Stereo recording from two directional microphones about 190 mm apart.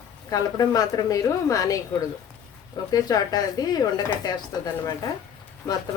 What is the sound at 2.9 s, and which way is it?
Speech, 20° left (ahead or behind).